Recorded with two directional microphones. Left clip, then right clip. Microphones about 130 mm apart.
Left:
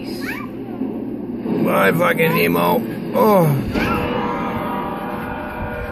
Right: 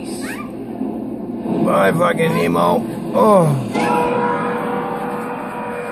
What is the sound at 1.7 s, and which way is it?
Speech, 15° left (ahead or behind).